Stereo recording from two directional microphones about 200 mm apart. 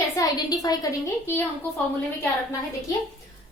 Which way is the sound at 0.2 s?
20° left (ahead or behind).